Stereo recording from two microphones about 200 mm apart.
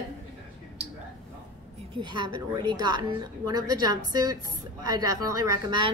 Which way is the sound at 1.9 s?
20° right (ahead or behind).